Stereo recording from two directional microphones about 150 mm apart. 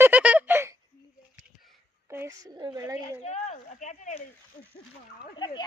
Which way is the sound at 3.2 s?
50° left (ahead or behind).